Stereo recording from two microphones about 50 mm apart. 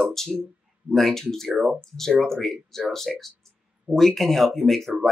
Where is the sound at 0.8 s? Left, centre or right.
Centre.